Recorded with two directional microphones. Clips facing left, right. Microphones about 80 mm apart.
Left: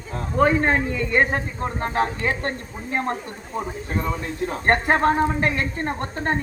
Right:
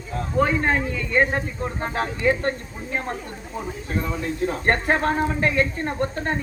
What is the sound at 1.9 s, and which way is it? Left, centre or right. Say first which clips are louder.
Speech: right 2 dB; left.